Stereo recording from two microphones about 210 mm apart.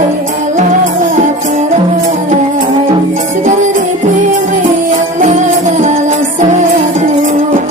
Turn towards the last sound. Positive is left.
turn(degrees=-35)  # may be behind; listen again after turning